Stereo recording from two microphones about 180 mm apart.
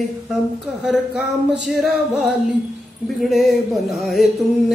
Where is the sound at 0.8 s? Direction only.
5° right (ahead or behind).